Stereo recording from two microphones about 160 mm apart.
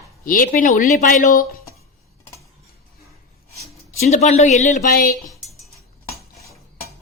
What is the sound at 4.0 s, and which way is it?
Speech, 45° left (ahead or behind).